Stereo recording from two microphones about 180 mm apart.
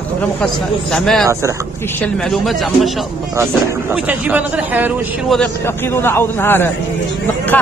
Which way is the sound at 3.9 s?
10° right (ahead or behind).